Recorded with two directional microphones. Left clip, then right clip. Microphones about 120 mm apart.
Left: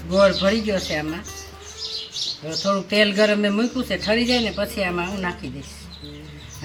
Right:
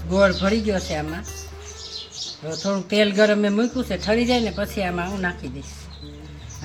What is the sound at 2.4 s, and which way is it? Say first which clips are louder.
Speech: left 2 dB; 15° right (ahead or behind).